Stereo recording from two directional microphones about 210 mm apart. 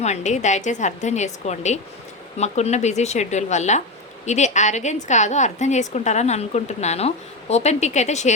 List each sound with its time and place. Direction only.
0.0 s a woman's voice: 35° left (ahead or behind)